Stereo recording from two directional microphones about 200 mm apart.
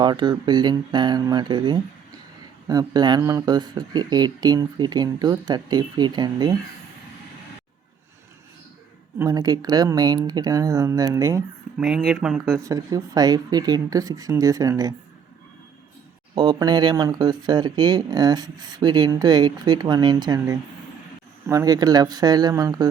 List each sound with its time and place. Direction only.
0.0 s speech: 20° right (ahead or behind)
9.1 s speech: 15° right (ahead or behind)
11.8 s speech: centre (ahead or behind)
12.5 s speech: 15° right (ahead or behind)
16.3 s speech: 20° right (ahead or behind)